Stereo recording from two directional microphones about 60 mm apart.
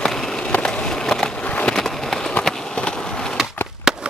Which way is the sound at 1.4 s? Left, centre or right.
Left.